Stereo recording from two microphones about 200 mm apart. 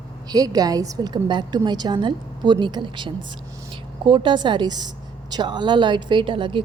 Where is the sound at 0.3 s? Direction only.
20° right (ahead or behind).